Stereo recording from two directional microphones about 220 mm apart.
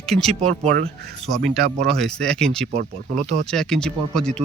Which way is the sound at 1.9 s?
5° left (ahead or behind).